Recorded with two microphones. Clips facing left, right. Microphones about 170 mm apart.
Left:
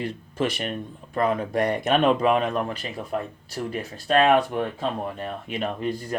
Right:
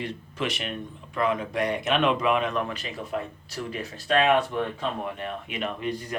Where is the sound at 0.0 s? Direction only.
40° left (ahead or behind).